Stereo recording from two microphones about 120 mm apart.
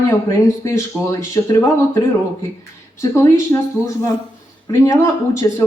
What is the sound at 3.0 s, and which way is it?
Speech, 20° left (ahead or behind).